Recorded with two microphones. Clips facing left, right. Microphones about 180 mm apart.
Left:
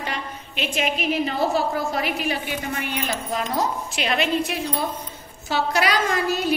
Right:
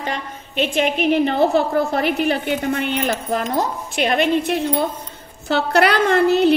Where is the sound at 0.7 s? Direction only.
60° right (ahead or behind).